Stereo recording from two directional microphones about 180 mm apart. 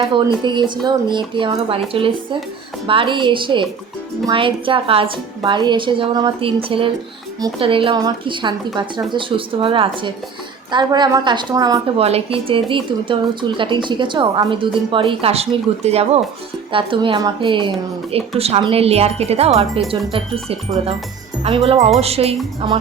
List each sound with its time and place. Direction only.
0.1 s a woman's voice: 25° right (ahead or behind)
11.9 s a woman's voice: 35° right (ahead or behind)